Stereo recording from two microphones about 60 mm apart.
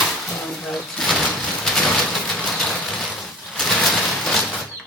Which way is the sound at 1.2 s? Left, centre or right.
Left.